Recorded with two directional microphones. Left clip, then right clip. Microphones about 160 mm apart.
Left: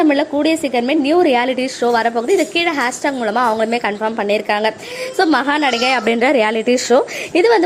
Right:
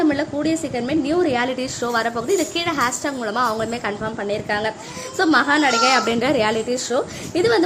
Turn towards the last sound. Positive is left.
turn(degrees=30)  # may be behind; listen again after turning